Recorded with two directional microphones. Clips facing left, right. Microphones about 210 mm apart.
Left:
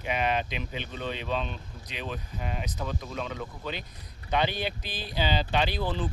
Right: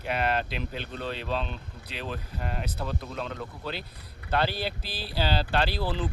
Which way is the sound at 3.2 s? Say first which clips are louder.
Even; 5° left (ahead or behind).